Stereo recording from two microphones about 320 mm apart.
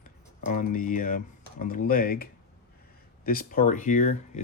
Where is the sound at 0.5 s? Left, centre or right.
Left.